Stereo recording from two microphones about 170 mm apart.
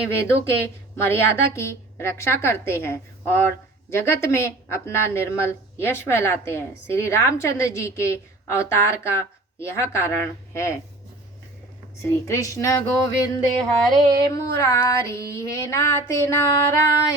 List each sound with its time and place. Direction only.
0.1 s a woman's voice: 15° left (ahead or behind)
12.3 s speech: 20° left (ahead or behind)
13.6 s a sound: 5° left (ahead or behind)
14.3 s a woman's voice: 20° left (ahead or behind)